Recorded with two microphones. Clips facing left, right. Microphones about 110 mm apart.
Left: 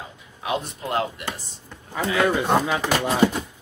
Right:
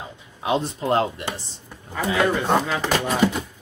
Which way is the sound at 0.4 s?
30° right (ahead or behind).